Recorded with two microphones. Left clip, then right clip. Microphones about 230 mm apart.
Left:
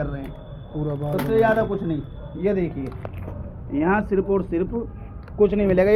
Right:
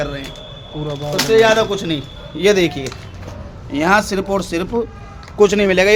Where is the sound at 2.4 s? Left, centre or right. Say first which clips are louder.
Right 10 dB; right.